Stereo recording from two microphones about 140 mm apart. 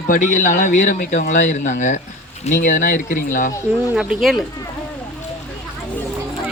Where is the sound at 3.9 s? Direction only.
5° right (ahead or behind).